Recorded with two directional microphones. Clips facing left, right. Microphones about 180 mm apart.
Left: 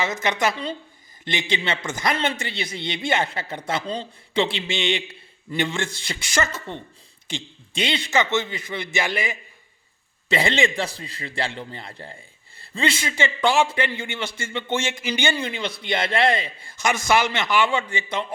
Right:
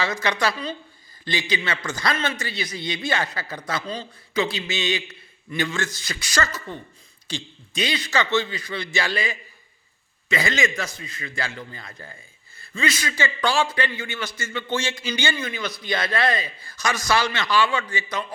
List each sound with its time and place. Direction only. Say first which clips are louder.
0.0 s a man's voice: left 1 dB; 20° left (ahead or behind)